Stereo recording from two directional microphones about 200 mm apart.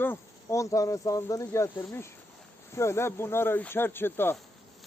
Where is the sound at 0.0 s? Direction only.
10° left (ahead or behind).